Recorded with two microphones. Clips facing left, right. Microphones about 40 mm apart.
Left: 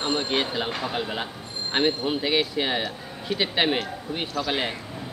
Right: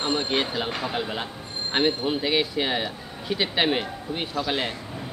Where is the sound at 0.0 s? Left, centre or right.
Centre.